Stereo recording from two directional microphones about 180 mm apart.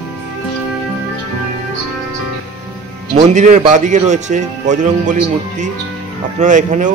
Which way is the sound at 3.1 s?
40° right (ahead or behind).